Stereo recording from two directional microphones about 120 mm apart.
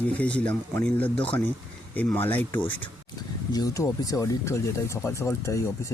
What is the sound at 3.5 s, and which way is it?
Speech, 30° left (ahead or behind).